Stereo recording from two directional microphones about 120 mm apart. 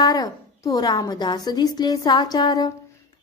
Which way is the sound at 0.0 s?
30° left (ahead or behind).